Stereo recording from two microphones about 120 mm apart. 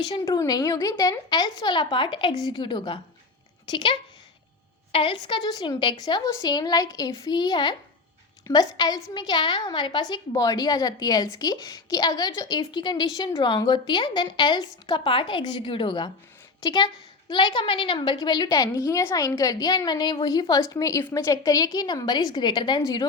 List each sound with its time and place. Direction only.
0.1 s a woman's voice: 30° left (ahead or behind)